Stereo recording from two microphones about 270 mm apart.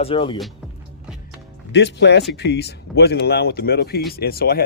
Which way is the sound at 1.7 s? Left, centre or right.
Left.